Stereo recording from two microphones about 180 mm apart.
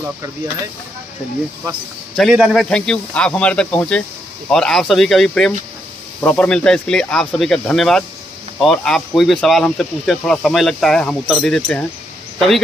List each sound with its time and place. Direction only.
2.1 s speech: centre (ahead or behind)